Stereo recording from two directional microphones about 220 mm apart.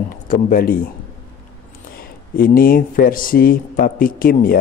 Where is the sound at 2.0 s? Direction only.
40° left (ahead or behind).